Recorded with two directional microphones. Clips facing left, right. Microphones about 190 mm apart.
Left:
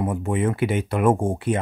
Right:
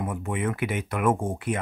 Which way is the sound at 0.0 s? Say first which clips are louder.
Left 6 dB; 30° left (ahead or behind).